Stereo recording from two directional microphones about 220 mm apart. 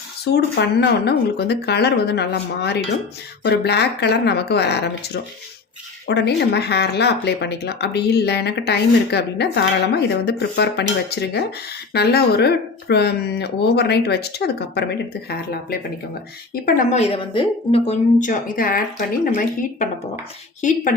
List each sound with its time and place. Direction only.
0.3 s speech: 50° left (ahead or behind)
16.6 s speech: 35° left (ahead or behind)